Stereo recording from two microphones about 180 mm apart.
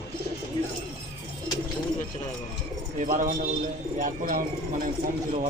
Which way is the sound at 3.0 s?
45° right (ahead or behind).